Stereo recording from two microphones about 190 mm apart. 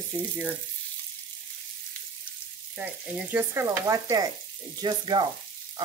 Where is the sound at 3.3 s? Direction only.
10° right (ahead or behind).